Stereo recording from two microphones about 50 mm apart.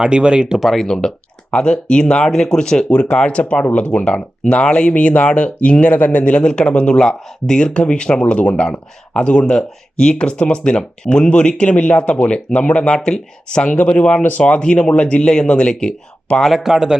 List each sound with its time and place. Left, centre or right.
0.0 s speech: centre
0.6 s speech: centre
0.9 s speech: centre
16.6 s speech: centre